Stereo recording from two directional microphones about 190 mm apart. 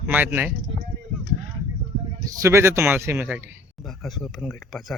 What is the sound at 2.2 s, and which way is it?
A man's voice, 15° right (ahead or behind).